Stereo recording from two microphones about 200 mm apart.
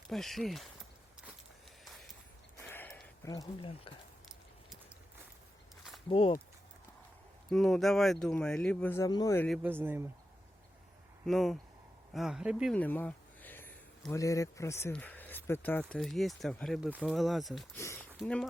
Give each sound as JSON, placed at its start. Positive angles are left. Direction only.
{"t": 0.1, "sound": "speech", "side_deg": 0}
{"t": 1.8, "sound": "a sound", "side_deg": 0}
{"t": 6.1, "sound": "speech", "side_deg": 25}
{"t": 7.5, "sound": "speech", "side_deg": 0}
{"t": 9.6, "sound": "speech", "side_deg": -10}
{"t": 11.3, "sound": "speech", "side_deg": 0}
{"t": 12.7, "sound": "speech", "side_deg": 10}
{"t": 17.7, "sound": "a sound", "side_deg": 15}